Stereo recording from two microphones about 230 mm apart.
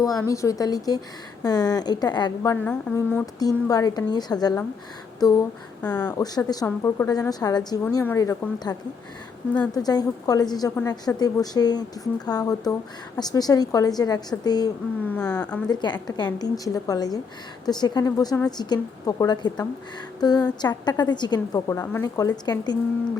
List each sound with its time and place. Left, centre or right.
0.0 s a woman's voice: centre
9.7 s a woman's voice: centre